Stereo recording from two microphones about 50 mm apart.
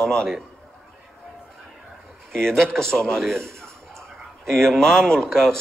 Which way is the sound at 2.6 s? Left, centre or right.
Centre.